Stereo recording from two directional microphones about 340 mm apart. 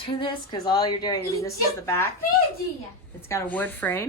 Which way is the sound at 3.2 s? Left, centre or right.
Centre.